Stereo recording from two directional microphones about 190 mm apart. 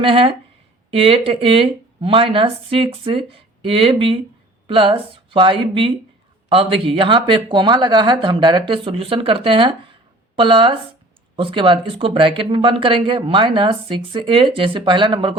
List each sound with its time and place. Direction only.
0.0 s speech: 30° right (ahead or behind)